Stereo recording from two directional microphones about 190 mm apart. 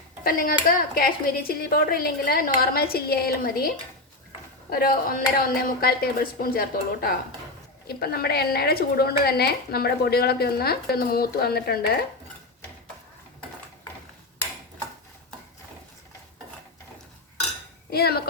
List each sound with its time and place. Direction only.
0.3 s speech: 50° left (ahead or behind)
4.7 s a woman's voice: 50° left (ahead or behind)
17.9 s a woman's voice: 55° left (ahead or behind)